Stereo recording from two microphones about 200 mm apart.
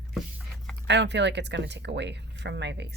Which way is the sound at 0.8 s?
60° right (ahead or behind).